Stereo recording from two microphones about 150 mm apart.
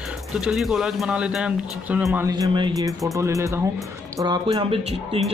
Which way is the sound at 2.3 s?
30° right (ahead or behind).